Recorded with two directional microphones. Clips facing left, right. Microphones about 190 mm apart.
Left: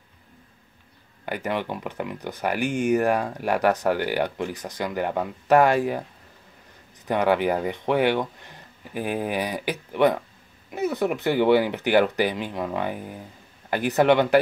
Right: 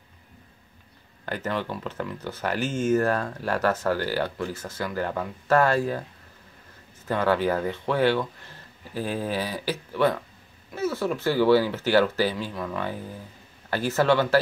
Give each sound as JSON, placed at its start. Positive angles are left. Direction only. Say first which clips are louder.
{"t": 1.2, "sound": "speech", "louder": "left 2 dB", "side_deg": 15}
{"t": 7.1, "sound": "speech", "louder": "left 2 dB", "side_deg": 15}